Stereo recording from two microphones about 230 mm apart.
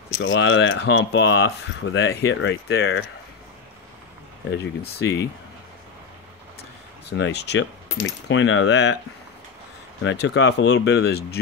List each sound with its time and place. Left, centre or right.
0.2 s speech: left
4.5 s speech: left
7.1 s speech: left
10.0 s speech: left